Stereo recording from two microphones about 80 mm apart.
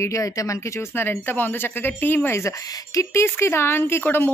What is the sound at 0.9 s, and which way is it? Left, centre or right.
A woman's voice, left.